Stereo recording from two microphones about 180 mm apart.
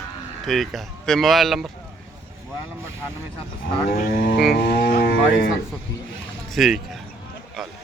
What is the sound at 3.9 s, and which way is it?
Livestock, 50° left (ahead or behind).